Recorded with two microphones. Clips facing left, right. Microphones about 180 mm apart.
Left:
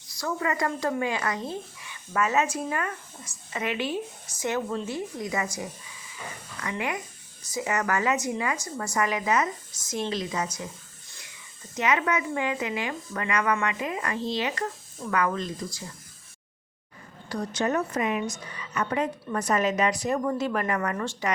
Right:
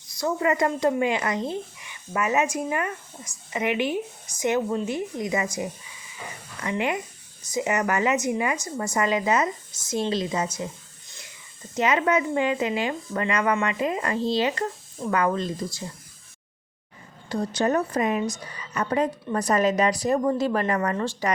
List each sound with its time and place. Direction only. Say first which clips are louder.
0.2 s a woman's voice: right 5 dB; 25° right (ahead or behind)
11.8 s a woman's voice: right 4 dB; 30° right (ahead or behind)
17.2 s a woman's voice: right 4 dB; 25° right (ahead or behind)